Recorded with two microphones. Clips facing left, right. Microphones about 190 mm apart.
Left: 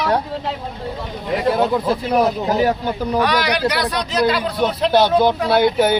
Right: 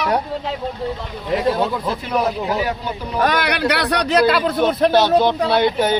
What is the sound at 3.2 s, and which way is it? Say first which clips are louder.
A man's voice: right 1 dB; 50° right (ahead or behind).